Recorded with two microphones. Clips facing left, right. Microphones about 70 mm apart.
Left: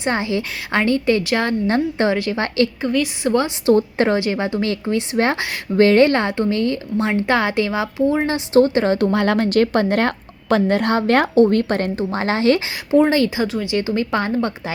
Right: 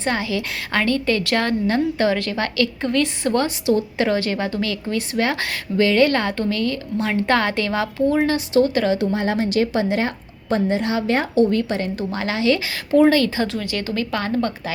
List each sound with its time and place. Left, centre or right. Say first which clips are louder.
0.0 s a woman's voice: left 2 dB; left
1.6 s a woman's voice: left 1 dB; left
2.8 s a woman's voice: left 1 dB; centre
3.7 s a woman's voice: left 5 dB; left
4.2 s a woman's voice: left 2 dB; left
6.1 s a woman's voice: left 3 dB; left
7.1 s a woman's voice: even; centre
8.5 s a woman's voice: left 4 dB; left
9.1 s a woman's voice: left 4 dB; left
11.9 s a woman's voice: left 3 dB; left
13.1 s a woman's voice: even; left
13.7 s a woman's voice: left 5 dB; left